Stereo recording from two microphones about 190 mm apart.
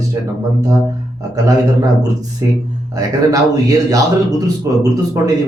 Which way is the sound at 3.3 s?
20° right (ahead or behind).